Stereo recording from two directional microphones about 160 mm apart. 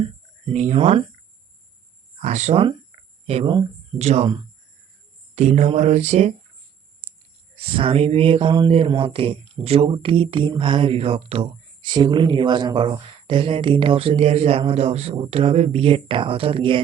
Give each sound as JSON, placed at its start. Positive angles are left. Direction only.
{"t": 0.5, "sound": "speech", "side_deg": -45}
{"t": 2.2, "sound": "mantra", "side_deg": -45}
{"t": 2.9, "sound": "a sound", "side_deg": -40}
{"t": 3.2, "sound": "speech", "side_deg": -35}
{"t": 5.3, "sound": "mantra", "side_deg": -45}
{"t": 7.5, "sound": "speech", "side_deg": -35}